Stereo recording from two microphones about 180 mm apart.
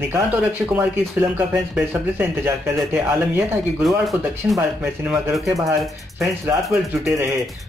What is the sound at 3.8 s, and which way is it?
Speech, centre (ahead or behind).